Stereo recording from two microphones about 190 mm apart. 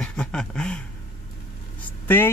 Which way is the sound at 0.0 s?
5° left (ahead or behind).